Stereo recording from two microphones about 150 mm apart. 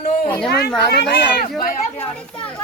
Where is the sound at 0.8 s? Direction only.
90° left.